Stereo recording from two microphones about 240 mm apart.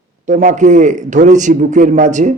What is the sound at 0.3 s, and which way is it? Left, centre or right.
Speech, right.